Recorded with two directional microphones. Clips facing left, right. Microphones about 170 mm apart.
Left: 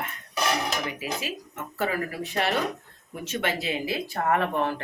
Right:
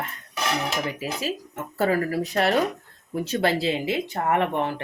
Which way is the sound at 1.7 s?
40° right (ahead or behind).